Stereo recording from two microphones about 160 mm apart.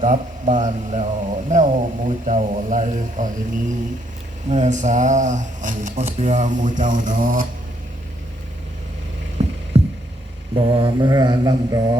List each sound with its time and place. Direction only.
0.0 s a man's voice: 55° right (ahead or behind)
4.4 s a man's voice: 45° right (ahead or behind)
9.7 s a sound: 40° right (ahead or behind)
10.5 s mantra: 30° right (ahead or behind)